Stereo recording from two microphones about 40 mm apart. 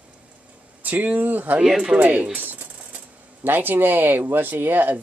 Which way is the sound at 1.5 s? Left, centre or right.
Right.